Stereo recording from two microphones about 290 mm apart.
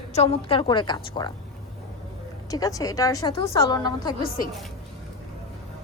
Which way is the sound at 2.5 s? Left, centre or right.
Centre.